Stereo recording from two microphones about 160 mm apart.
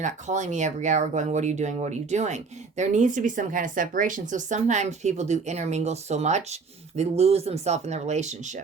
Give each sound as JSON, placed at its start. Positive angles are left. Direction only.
{"t": 0.0, "sound": "speech", "side_deg": -45}